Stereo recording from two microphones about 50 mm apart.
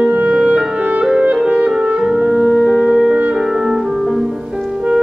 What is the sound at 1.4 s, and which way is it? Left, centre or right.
Music, centre.